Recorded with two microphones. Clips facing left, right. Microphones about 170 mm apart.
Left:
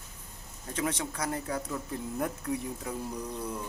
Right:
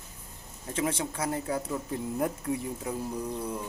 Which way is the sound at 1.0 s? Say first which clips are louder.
Right 2 dB; 25° right (ahead or behind).